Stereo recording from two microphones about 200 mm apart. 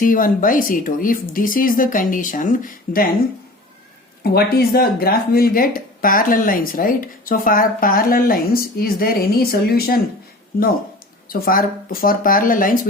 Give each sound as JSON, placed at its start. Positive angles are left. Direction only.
{"t": 0.0, "sound": "speech", "side_deg": 45}
{"t": 4.2, "sound": "speech", "side_deg": 50}
{"t": 11.3, "sound": "speech", "side_deg": 45}